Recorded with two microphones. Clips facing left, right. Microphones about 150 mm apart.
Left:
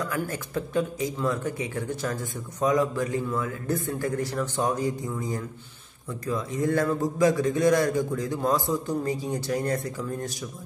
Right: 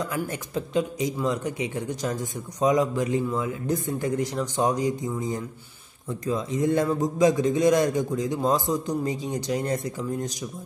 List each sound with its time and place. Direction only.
0.0 s a man's voice: 20° right (ahead or behind)